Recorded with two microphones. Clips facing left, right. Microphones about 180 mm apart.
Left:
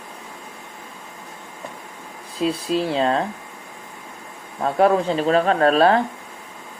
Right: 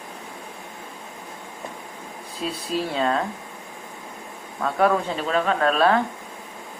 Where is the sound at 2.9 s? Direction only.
30° left (ahead or behind).